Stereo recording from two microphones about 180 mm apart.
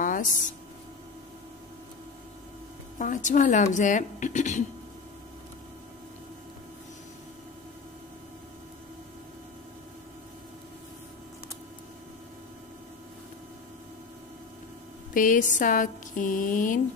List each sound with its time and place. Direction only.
0.0 s a sound: 45° left (ahead or behind)
3.0 s speech: 45° left (ahead or behind)
15.1 s speech: 45° left (ahead or behind)